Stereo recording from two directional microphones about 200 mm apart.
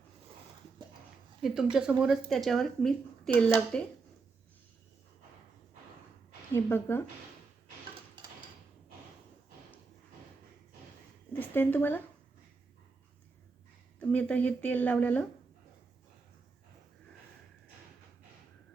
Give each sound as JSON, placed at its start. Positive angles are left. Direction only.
{"t": 1.4, "sound": "speech", "side_deg": 0}
{"t": 6.5, "sound": "speech", "side_deg": 10}
{"t": 11.3, "sound": "a woman's voice", "side_deg": 10}
{"t": 14.0, "sound": "speech", "side_deg": 5}